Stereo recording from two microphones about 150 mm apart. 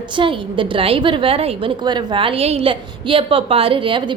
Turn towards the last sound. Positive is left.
turn(degrees=-35)  # may be behind; listen again after turning